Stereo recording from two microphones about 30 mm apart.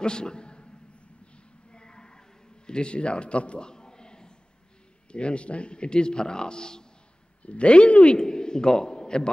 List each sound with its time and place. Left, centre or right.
0.0 s a sound: left
5.1 s speech: left
7.4 s a man's voice: left